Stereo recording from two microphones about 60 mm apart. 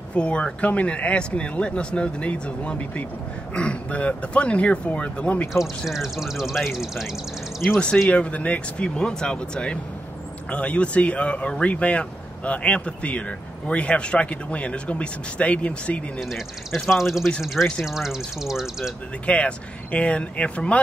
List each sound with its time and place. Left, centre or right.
0.1 s speech: centre
5.5 s speech: centre
8.1 s speech: left
16.2 s speech: centre
19.2 s speech: left